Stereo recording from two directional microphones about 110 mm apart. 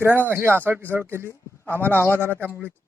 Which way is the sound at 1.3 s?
20° left (ahead or behind).